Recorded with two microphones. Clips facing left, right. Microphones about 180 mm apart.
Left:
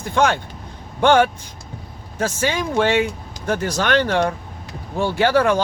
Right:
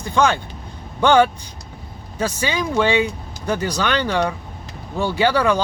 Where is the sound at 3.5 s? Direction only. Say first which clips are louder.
Left 1 dB; 50° left (ahead or behind).